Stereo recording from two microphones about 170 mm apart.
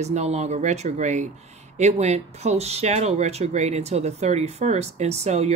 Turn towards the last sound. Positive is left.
turn(degrees=-40)  # may be behind; listen again after turning